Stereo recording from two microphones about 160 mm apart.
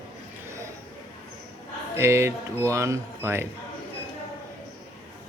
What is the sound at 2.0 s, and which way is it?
Speech, 15° right (ahead or behind).